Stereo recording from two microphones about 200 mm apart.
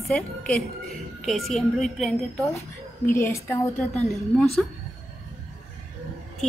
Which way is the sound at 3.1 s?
10° left (ahead or behind).